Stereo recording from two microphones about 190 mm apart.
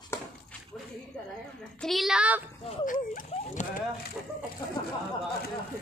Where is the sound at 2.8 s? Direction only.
45° left (ahead or behind).